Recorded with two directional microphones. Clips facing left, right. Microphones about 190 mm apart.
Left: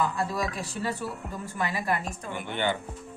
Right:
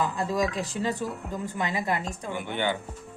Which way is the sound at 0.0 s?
20° right (ahead or behind).